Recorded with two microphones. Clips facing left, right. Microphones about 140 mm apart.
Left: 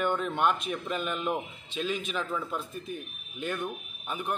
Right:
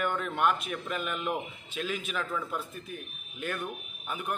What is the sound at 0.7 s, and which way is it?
Speech, 30° left (ahead or behind).